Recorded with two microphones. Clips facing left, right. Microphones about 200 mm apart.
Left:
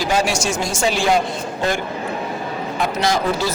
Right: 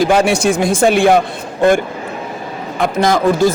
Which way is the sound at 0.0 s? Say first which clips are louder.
Right 7 dB; 55° right (ahead or behind).